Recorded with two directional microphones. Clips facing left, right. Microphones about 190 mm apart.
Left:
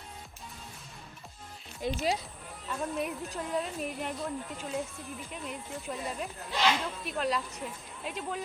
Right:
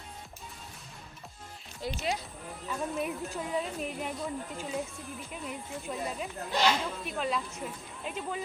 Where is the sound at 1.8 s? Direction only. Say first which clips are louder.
Left 3 dB; 15° left (ahead or behind).